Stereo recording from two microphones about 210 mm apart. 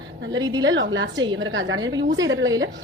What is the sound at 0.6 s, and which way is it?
A woman's voice, 60° right (ahead or behind).